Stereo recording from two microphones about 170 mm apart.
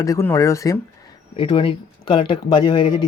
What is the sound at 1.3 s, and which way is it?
Speech, 30° left (ahead or behind).